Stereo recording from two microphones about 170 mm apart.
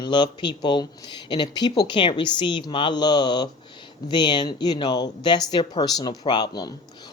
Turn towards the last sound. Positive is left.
turn(degrees=25)  # may be behind; listen again after turning